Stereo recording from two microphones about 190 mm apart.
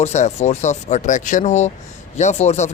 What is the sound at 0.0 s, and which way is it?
Speech, 35° left (ahead or behind).